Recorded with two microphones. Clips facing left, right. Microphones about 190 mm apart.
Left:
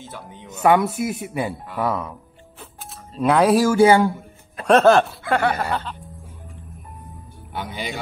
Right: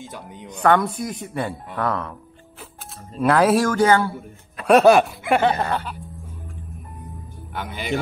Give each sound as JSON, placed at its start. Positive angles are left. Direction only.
{"t": 0.7, "sound": "speech", "side_deg": 5}
{"t": 3.2, "sound": "speech", "side_deg": 0}
{"t": 4.6, "sound": "chuckle", "side_deg": -10}